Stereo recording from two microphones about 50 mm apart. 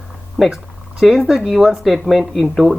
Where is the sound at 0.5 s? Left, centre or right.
Centre.